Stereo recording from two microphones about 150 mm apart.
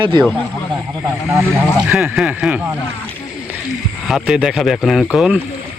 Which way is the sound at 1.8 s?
10° right (ahead or behind).